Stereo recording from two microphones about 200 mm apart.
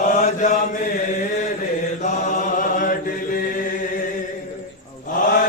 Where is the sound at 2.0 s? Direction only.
40° left (ahead or behind).